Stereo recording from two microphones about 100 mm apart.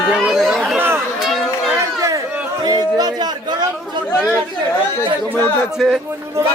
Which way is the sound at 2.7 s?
40° right (ahead or behind).